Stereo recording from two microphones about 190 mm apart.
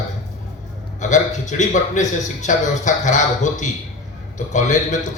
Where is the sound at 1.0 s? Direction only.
40° left (ahead or behind).